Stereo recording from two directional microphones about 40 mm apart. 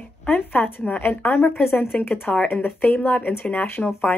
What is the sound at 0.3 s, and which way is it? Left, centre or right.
Speech, left.